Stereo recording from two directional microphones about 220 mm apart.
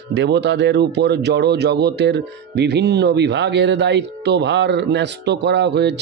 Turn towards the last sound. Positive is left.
turn(degrees=-50)  # may be behind; listen again after turning